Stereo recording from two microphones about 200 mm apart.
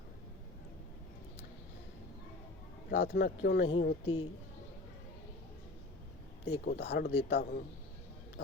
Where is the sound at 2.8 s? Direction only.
50° left (ahead or behind).